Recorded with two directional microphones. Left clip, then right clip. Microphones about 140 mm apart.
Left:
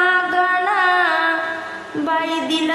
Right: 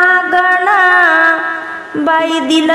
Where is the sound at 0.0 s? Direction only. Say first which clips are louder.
Right 6 dB; 40° right (ahead or behind).